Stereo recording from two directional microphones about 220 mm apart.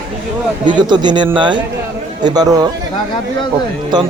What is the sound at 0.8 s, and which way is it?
A man's voice, 20° right (ahead or behind).